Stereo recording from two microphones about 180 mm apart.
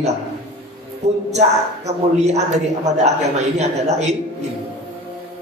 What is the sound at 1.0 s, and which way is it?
A man's voice, 40° right (ahead or behind).